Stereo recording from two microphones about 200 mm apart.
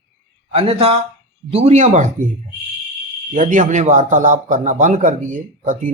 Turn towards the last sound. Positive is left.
turn(degrees=-40)  # may be behind; listen again after turning